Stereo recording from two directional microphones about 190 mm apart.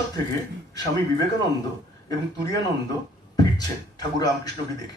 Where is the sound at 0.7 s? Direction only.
20° left (ahead or behind).